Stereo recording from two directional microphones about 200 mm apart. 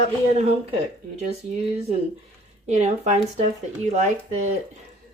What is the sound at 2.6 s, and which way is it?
Speech, 35° right (ahead or behind).